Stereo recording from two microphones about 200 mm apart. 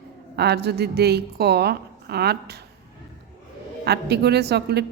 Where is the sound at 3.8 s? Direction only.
55° right (ahead or behind).